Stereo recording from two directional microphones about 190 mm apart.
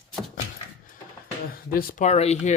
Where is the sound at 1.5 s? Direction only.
50° left (ahead or behind).